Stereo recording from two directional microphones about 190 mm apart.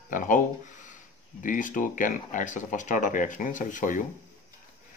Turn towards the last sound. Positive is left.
turn(degrees=45)  # may be behind; listen again after turning